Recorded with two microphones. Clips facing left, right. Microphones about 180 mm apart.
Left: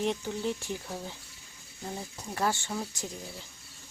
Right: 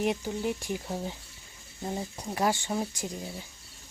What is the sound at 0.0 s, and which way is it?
A woman's voice, 10° right (ahead or behind).